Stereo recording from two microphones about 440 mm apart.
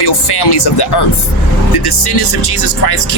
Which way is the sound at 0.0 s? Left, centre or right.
Left.